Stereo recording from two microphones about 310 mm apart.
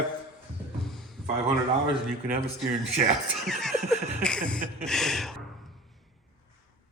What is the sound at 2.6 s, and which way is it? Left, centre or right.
Speech, centre.